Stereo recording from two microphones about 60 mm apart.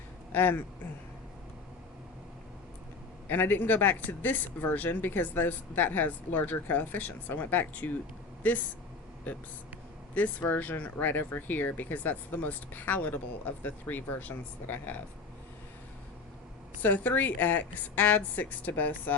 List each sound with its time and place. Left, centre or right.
0.3 s speech: left
3.2 s speech: left
10.2 s speech: left
16.8 s speech: left